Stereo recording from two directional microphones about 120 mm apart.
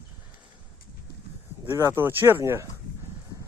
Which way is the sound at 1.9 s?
20° right (ahead or behind).